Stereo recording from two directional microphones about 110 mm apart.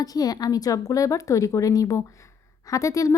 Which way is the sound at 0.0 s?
35° left (ahead or behind).